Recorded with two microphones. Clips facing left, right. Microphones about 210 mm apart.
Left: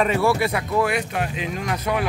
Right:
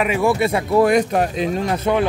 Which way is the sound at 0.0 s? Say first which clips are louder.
Right 2 dB; 15° right (ahead or behind).